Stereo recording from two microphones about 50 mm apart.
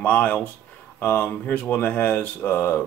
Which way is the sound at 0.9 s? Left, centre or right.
Left.